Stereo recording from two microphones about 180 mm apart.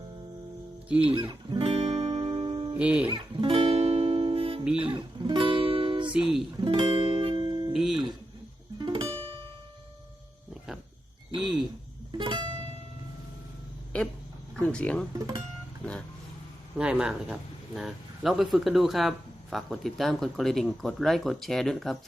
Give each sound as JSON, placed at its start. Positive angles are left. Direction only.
{"t": 0.9, "sound": "speech", "side_deg": -5}
{"t": 1.1, "sound": "guitar", "side_deg": -25}
{"t": 2.7, "sound": "speech", "side_deg": -5}
{"t": 3.1, "sound": "music", "side_deg": -30}
{"t": 4.8, "sound": "guitar", "side_deg": -25}
{"t": 6.1, "sound": "speech", "side_deg": -5}
{"t": 6.6, "sound": "music", "side_deg": -25}
{"t": 7.7, "sound": "speech", "side_deg": 0}
{"t": 8.8, "sound": "music", "side_deg": -30}
{"t": 11.3, "sound": "speech", "side_deg": 0}
{"t": 12.1, "sound": "music", "side_deg": -25}
{"t": 13.9, "sound": "speech", "side_deg": 5}
{"t": 16.7, "sound": "speech", "side_deg": -5}